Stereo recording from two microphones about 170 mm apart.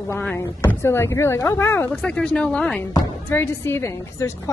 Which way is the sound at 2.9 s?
25° left (ahead or behind).